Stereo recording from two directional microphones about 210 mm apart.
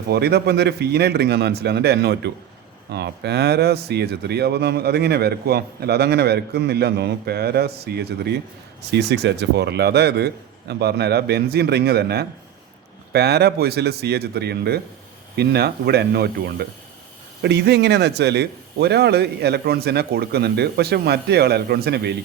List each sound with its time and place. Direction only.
0.1 s speech: 50° right (ahead or behind)